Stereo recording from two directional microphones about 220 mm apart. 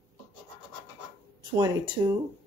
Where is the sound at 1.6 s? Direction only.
15° right (ahead or behind).